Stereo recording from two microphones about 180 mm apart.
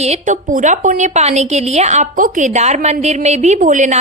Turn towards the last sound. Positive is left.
turn(degrees=-45)  # may be behind; listen again after turning